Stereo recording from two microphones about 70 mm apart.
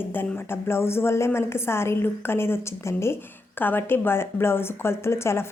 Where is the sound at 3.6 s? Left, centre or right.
Left.